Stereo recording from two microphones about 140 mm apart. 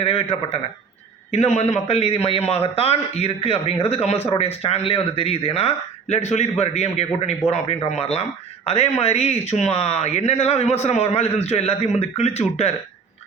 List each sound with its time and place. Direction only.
0.0 s speech: 45° left (ahead or behind)